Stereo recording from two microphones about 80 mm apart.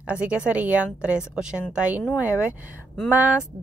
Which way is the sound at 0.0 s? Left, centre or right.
Centre.